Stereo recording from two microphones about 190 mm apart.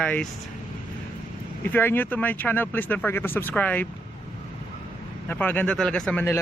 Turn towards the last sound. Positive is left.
turn(degrees=10)  # may be behind; listen again after turning